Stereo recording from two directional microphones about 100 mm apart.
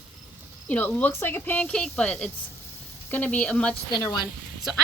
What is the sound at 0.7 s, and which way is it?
Speech, 15° left (ahead or behind).